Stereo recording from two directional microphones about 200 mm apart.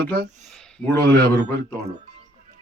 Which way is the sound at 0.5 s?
5° left (ahead or behind).